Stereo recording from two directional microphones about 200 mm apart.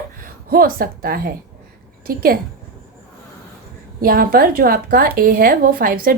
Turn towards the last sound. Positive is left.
turn(degrees=-45)  # may be behind; listen again after turning